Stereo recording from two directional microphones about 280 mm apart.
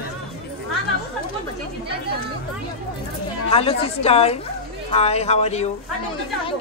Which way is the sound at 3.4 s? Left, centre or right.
Left.